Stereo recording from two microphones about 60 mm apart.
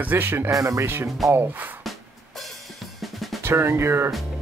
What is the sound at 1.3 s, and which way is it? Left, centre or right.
Speech, right.